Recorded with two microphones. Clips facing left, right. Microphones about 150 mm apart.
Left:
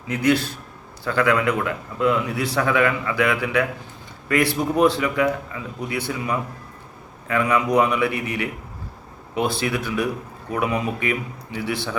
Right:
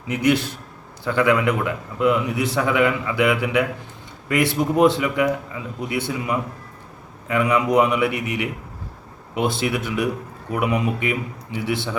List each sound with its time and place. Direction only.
0.1 s a man's voice: 20° right (ahead or behind)